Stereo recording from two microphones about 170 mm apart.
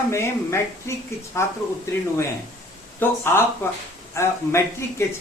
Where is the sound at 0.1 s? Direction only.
15° left (ahead or behind).